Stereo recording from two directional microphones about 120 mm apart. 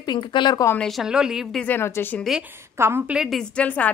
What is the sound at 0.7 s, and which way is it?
Speech, centre (ahead or behind).